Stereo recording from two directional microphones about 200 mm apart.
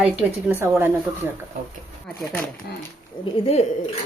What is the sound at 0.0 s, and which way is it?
Speech, 10° right (ahead or behind).